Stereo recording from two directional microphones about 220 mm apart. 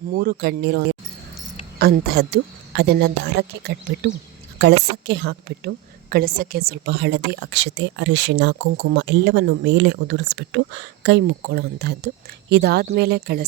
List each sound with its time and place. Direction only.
0.1 s a woman's voice: 40° right (ahead or behind)